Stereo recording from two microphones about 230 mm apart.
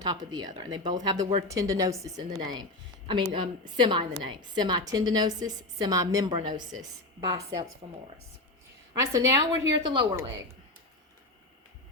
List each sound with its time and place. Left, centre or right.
0.0 s a woman's voice: centre